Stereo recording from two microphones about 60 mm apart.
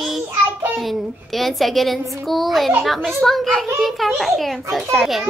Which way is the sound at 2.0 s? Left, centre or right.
Right.